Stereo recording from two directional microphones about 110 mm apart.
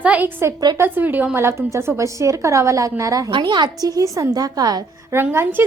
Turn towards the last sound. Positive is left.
turn(degrees=-20)  # may be behind; listen again after turning